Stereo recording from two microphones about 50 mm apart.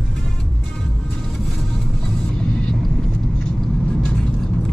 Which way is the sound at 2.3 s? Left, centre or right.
Centre.